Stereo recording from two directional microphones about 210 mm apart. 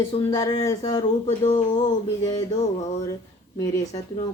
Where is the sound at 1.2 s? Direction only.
35° left (ahead or behind).